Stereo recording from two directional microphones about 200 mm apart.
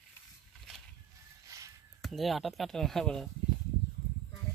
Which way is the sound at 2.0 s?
Centre (ahead or behind).